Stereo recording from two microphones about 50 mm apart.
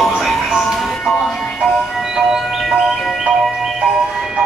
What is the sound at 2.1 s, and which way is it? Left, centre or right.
Music, centre.